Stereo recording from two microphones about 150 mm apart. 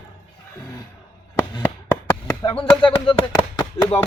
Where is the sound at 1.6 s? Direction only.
15° left (ahead or behind).